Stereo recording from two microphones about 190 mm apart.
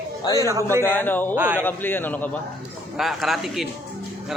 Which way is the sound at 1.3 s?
5° right (ahead or behind).